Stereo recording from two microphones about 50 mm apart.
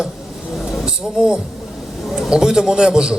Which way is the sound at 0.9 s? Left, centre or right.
Centre.